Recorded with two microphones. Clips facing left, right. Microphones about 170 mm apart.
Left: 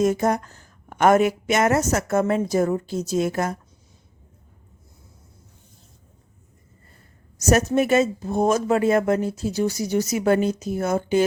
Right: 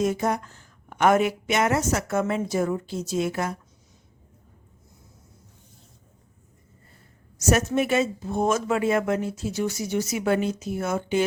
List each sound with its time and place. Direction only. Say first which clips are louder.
0.0 s a woman's voice: left 4 dB; 45° left (ahead or behind)
7.3 s speech: left 3 dB; 40° left (ahead or behind)